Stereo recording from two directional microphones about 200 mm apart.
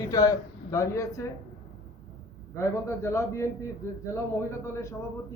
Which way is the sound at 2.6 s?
15° left (ahead or behind).